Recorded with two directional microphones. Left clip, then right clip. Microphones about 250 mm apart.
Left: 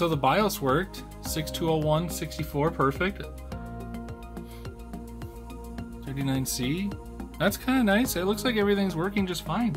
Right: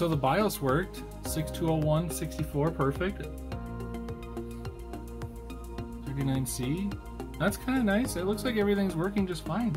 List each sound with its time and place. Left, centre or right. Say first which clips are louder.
0.0 s speech: left 3 dB; centre
5.8 s speech: left 1 dB; centre